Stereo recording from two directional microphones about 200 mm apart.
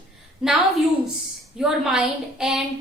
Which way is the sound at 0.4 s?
5° right (ahead or behind).